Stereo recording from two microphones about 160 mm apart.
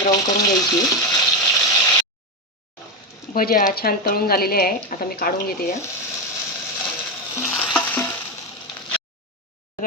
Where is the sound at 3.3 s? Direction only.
65° left (ahead or behind).